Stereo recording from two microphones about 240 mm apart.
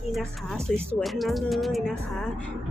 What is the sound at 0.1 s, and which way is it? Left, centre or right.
Speech, centre.